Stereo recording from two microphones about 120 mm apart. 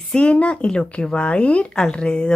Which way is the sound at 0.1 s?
10° left (ahead or behind).